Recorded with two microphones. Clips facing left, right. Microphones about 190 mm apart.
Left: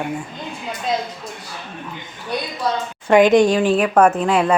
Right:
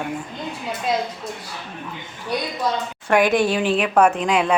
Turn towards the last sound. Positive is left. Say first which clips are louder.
# left 2 dB
turn(degrees=5)  # may be behind; listen again after turning